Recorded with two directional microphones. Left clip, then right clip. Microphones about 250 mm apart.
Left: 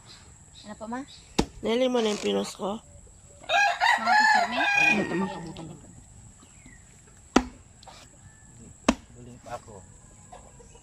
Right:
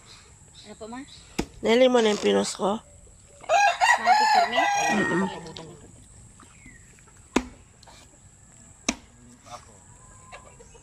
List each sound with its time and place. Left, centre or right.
0.7 s speech: left
1.6 s speech: centre
3.4 s chicken: centre
5.0 s speech: centre